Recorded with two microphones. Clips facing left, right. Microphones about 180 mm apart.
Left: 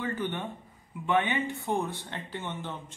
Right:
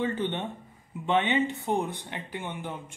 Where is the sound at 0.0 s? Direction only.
25° right (ahead or behind).